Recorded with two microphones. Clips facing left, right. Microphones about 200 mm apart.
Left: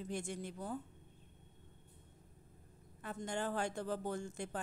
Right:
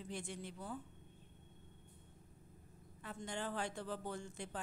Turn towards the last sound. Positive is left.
turn(degrees=45)  # may be behind; listen again after turning